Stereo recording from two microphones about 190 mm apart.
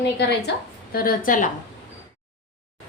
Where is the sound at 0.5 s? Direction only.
65° left (ahead or behind).